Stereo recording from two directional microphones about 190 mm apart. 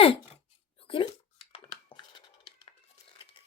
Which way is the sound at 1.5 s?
25° left (ahead or behind).